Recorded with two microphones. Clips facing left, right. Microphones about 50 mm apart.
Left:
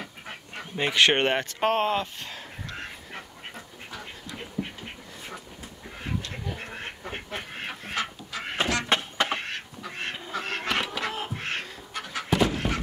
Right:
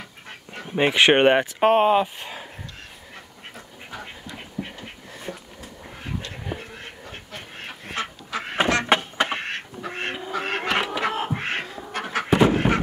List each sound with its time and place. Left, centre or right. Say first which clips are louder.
0.7 s speech: right 5 dB; right
3.9 s duck: right 3 dB; centre
7.9 s chicken: right 4 dB; right
8.8 s a sound: right 4 dB; centre
9.8 s duck: right 6 dB; right
10.1 s duck: right 4 dB; centre
10.4 s a sound: right 4 dB; right
11.9 s dog: right 8 dB; right
12.3 s a sound: right 6 dB; right